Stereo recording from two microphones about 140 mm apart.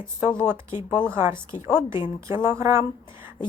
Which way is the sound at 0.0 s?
15° right (ahead or behind).